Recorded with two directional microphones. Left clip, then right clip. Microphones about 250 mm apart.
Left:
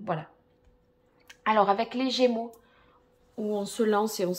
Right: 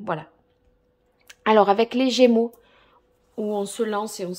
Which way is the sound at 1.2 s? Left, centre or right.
Right.